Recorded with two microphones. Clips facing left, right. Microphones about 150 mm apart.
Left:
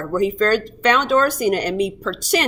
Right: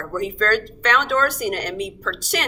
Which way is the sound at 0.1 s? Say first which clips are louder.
Left 4 dB; 15° left (ahead or behind).